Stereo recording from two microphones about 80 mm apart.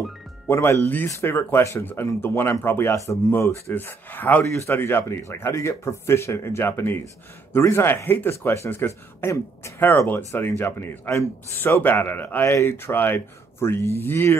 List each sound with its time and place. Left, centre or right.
0.5 s speech: left
3.7 s speech: left
4.6 s speech: left
9.8 s speech: left